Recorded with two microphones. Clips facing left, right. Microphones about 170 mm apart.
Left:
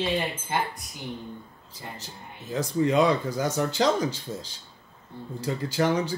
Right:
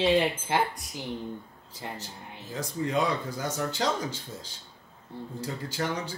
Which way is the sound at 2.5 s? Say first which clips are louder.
Left 6 dB; 90° left.